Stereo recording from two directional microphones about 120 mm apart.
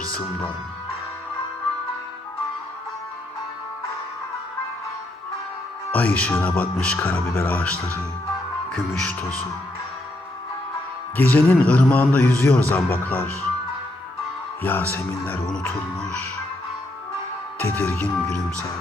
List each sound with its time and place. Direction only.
5.9 s a man's voice: 10° left (ahead or behind)
11.2 s a man's voice: 15° left (ahead or behind)
14.6 s a man's voice: 15° left (ahead or behind)
17.7 s a man's voice: 15° left (ahead or behind)